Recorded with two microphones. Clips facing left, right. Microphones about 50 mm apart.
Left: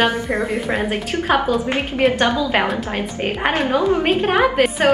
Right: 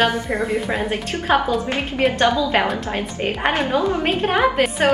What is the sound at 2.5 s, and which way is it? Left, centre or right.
A woman's voice, centre.